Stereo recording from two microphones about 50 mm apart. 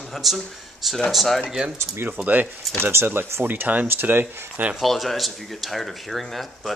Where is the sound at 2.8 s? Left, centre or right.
Right.